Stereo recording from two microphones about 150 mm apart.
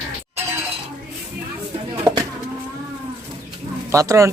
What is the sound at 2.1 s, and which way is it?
Livestock, 25° right (ahead or behind).